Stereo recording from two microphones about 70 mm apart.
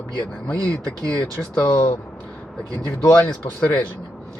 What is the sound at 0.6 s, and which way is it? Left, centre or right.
Speech, right.